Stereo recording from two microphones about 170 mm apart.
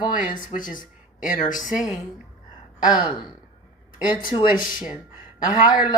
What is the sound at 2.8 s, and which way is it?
Speech, 25° left (ahead or behind).